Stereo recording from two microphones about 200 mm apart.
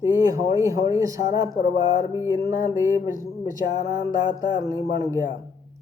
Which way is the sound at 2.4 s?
45° left (ahead or behind).